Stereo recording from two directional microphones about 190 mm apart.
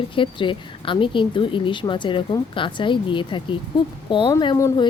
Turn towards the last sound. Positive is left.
turn(degrees=20)  # may be behind; listen again after turning